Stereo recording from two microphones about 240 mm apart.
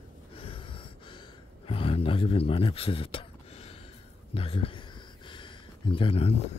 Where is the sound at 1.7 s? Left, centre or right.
Left.